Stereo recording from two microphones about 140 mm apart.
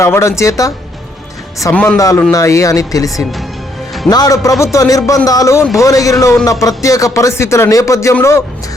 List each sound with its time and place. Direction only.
0.0 s speech: 20° left (ahead or behind)
1.7 s a man's voice: 10° left (ahead or behind)
2.0 s speech: 25° left (ahead or behind)
4.1 s speech: 25° left (ahead or behind)